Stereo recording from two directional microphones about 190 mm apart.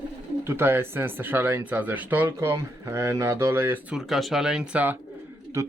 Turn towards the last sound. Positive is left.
turn(degrees=-15)  # may be behind; listen again after turning